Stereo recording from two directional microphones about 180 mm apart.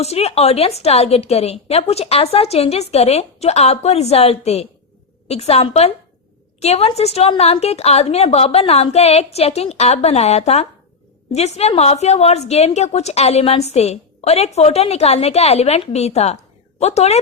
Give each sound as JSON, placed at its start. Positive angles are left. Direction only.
{"t": 0.0, "sound": "a woman's voice", "side_deg": 35}